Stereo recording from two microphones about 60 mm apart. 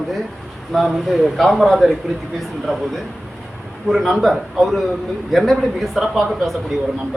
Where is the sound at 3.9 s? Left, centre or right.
Centre.